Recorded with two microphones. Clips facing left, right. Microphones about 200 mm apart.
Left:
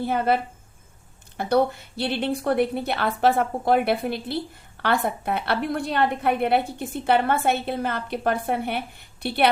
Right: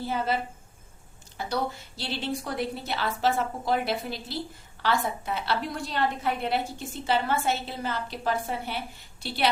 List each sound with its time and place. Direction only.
0.0 s a woman's voice: 60° left (ahead or behind)
1.4 s a woman's voice: 60° left (ahead or behind)